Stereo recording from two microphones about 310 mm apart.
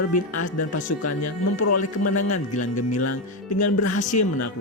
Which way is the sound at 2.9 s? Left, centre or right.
Left.